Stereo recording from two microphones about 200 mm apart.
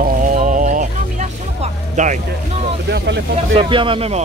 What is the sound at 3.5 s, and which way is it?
Speech, 25° right (ahead or behind).